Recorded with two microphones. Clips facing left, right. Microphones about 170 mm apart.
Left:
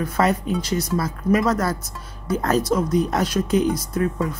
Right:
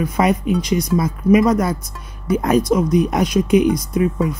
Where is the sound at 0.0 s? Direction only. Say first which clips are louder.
Right 3 dB; 15° right (ahead or behind).